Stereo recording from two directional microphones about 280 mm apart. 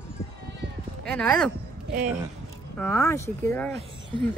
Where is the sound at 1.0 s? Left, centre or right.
Centre.